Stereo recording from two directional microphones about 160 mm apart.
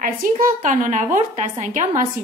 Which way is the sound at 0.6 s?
55° right (ahead or behind).